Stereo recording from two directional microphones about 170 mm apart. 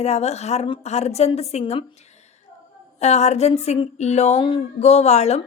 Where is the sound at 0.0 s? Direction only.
40° left (ahead or behind).